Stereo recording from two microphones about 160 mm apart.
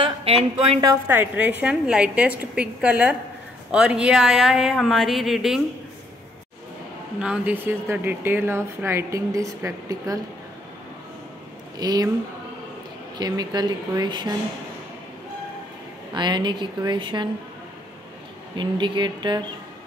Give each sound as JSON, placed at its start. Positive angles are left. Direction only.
{"t": 0.0, "sound": "speech", "side_deg": -40}
{"t": 1.0, "sound": "speech", "side_deg": -15}
{"t": 7.2, "sound": "speech", "side_deg": -5}
{"t": 11.8, "sound": "a woman's voice", "side_deg": -25}
{"t": 13.2, "sound": "a woman's voice", "side_deg": -25}
{"t": 16.1, "sound": "a woman's voice", "side_deg": -30}
{"t": 18.6, "sound": "a woman's voice", "side_deg": -30}